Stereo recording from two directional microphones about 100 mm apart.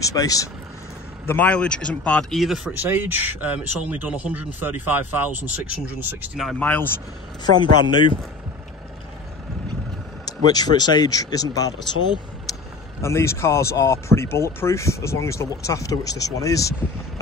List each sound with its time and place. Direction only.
0.0 s speech: 35° left (ahead or behind)
1.2 s speech: 20° left (ahead or behind)
2.4 s speech: 5° right (ahead or behind)
2.8 s speech: 20° right (ahead or behind)
6.6 s speech: 15° left (ahead or behind)
10.2 s speech: 40° left (ahead or behind)